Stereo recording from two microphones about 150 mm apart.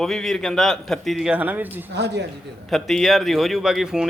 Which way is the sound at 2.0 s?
90° right.